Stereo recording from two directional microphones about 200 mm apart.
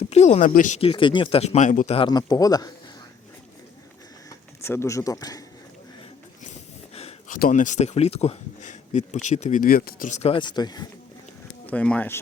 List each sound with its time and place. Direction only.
0.1 s speech: 35° left (ahead or behind)
2.0 s a man's voice: 20° left (ahead or behind)
4.3 s speech: 15° left (ahead or behind)
6.9 s a sound: 30° left (ahead or behind)
7.3 s speech: 45° left (ahead or behind); by 10.8 s 20° left (ahead or behind)
11.6 s speech: 5° left (ahead or behind)